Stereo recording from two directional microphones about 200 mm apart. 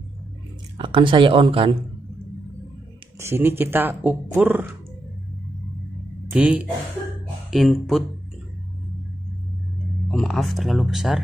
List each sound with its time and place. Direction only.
0.7 s speech: 25° right (ahead or behind)
3.2 s speech: 10° right (ahead or behind)
6.3 s speech: 5° right (ahead or behind)
10.1 s speech: centre (ahead or behind)